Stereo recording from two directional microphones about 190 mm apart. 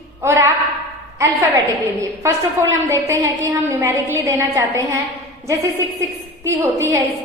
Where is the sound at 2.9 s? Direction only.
15° right (ahead or behind).